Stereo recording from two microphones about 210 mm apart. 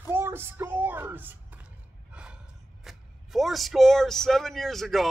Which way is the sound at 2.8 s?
Centre (ahead or behind).